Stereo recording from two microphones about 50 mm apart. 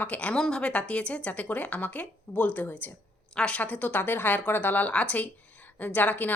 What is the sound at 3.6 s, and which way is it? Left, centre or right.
Speech, left.